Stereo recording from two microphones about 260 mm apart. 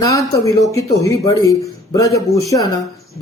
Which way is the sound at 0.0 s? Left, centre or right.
Centre.